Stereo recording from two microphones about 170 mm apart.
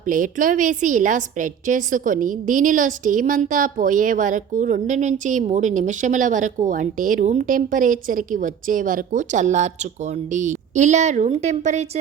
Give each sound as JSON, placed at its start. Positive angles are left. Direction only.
{"t": 0.0, "sound": "a woman's voice", "side_deg": -50}